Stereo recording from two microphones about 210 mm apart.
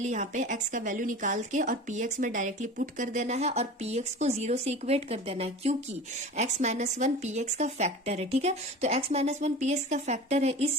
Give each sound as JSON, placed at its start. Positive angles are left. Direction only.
{"t": 0.0, "sound": "a woman's voice", "side_deg": -35}